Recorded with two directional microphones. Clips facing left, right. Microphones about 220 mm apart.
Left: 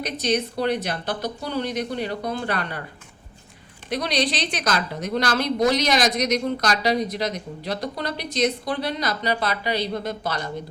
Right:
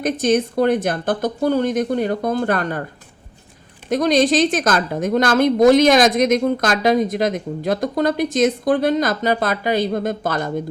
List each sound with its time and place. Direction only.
0.0 s a woman's voice: 50° right (ahead or behind)
3.8 s a woman's voice: 45° right (ahead or behind)